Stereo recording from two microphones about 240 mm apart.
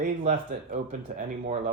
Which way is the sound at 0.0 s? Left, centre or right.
Right.